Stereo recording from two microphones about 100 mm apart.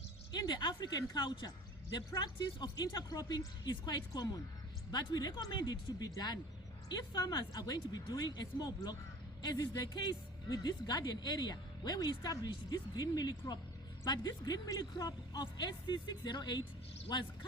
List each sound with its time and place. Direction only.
0.3 s speech: 45° left (ahead or behind)